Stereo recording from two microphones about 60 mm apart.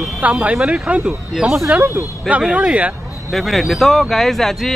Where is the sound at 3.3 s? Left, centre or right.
Centre.